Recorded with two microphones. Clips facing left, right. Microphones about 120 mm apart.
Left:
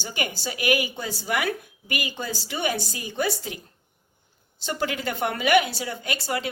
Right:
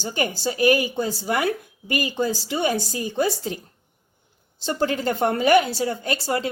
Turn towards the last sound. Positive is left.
turn(degrees=-35)  # may be behind; listen again after turning